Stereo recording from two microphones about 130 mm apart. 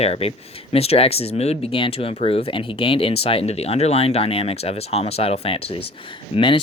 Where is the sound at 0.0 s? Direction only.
50° left (ahead or behind).